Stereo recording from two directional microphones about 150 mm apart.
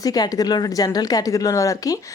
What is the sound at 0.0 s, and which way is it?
A woman's voice, 25° left (ahead or behind).